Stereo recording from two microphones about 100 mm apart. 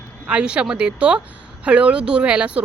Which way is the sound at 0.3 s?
10° right (ahead or behind).